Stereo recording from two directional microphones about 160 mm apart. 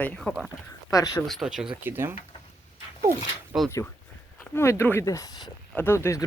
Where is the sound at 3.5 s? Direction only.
5° right (ahead or behind).